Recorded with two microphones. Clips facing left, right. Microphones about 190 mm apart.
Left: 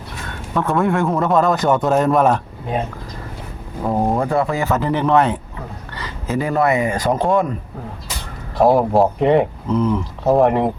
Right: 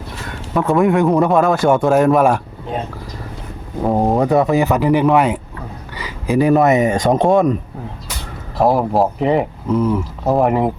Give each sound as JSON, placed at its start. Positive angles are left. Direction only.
{"t": 0.5, "sound": "speech", "side_deg": -15}
{"t": 1.3, "sound": "speech", "side_deg": -5}
{"t": 3.8, "sound": "speech", "side_deg": -20}
{"t": 8.5, "sound": "speech", "side_deg": 0}